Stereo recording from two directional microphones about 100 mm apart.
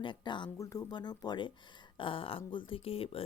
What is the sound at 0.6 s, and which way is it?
Speech, 35° left (ahead or behind).